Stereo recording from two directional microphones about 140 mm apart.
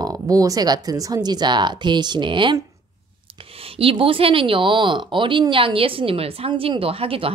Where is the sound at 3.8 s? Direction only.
40° right (ahead or behind).